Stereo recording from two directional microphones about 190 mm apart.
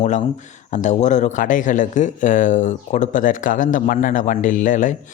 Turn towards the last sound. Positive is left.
turn(degrees=40)  # may be behind; listen again after turning